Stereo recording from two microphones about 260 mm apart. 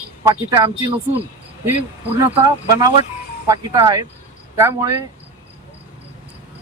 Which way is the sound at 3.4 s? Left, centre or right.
Centre.